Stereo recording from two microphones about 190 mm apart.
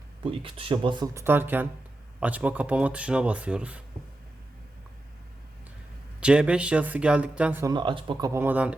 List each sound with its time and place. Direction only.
0.2 s speech: 30° right (ahead or behind); by 3.8 s 5° right (ahead or behind)
6.1 s speech: 5° right (ahead or behind)